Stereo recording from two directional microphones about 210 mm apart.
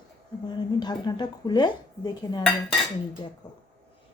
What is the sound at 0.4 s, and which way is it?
Speech, 20° left (ahead or behind).